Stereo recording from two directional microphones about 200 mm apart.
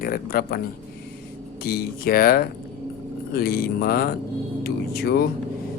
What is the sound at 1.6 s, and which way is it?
Speech, 50° left (ahead or behind).